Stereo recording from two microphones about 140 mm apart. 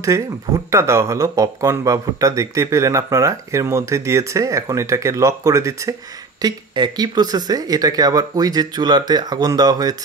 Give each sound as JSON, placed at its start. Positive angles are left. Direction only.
{"t": 0.7, "sound": "speech", "side_deg": -20}